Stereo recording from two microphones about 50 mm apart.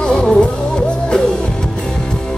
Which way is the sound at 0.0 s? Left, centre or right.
Centre.